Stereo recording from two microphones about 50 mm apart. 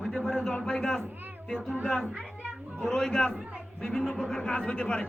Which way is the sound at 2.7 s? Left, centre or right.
Centre.